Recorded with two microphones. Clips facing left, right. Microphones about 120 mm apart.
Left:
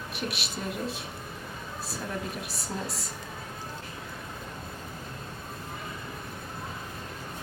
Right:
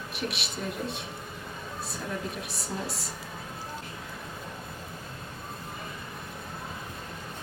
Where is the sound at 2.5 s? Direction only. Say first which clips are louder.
Even; centre (ahead or behind).